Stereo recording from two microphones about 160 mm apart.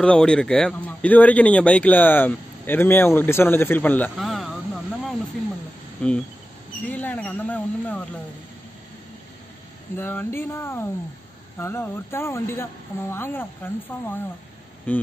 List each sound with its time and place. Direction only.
0.0 s speech: 5° left (ahead or behind)
4.2 s vehicle: centre (ahead or behind)
6.0 s speech: 5° left (ahead or behind)
9.9 s speech: 15° left (ahead or behind)
14.9 s speech: 10° left (ahead or behind)